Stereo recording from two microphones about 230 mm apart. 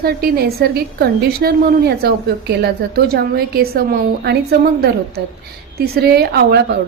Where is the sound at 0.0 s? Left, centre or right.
Right.